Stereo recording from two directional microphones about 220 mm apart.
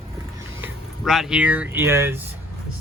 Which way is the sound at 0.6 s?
Centre (ahead or behind).